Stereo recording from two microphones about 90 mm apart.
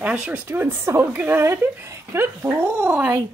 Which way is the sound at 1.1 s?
15° right (ahead or behind).